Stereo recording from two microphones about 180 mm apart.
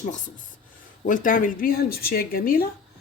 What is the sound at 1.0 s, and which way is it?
Speech, 50° left (ahead or behind).